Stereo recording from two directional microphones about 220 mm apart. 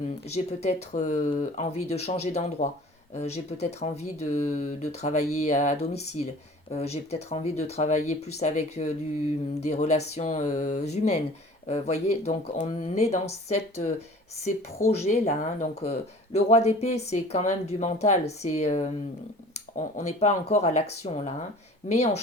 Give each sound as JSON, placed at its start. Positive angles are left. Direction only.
{"t": 0.3, "sound": "speech", "side_deg": 30}
{"t": 14.4, "sound": "speech", "side_deg": 30}